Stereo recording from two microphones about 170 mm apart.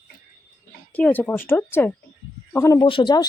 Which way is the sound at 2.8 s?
30° left (ahead or behind).